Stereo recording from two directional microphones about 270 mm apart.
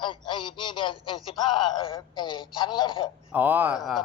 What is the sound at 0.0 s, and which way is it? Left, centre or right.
A man's voice, centre.